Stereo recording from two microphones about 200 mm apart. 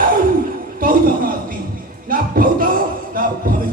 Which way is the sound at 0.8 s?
45° right (ahead or behind).